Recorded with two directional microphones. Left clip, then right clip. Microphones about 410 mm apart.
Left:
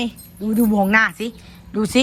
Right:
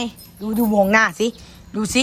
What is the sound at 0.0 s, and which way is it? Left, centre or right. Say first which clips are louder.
Speech: left 2 dB; centre.